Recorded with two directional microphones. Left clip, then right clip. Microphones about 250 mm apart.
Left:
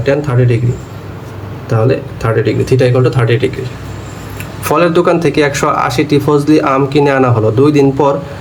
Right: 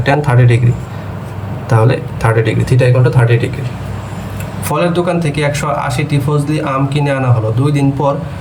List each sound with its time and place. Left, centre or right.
0.0 s speech: centre
1.9 s speech: centre
4.6 s speech: centre